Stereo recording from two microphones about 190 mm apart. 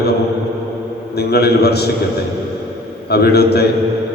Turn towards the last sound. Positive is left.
turn(degrees=60)  # may be behind; listen again after turning